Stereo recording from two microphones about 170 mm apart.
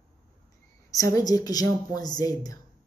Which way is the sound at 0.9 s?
20° left (ahead or behind).